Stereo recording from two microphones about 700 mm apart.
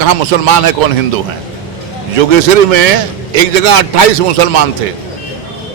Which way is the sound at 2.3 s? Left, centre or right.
Right.